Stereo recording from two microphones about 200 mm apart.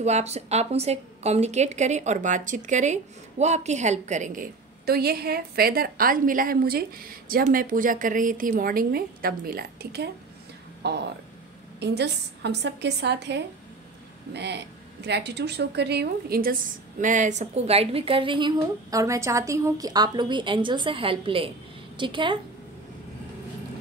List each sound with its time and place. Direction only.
0.0 s a woman's voice: 35° right (ahead or behind)
4.8 s a woman's voice: 50° right (ahead or behind); by 22.4 s 25° right (ahead or behind)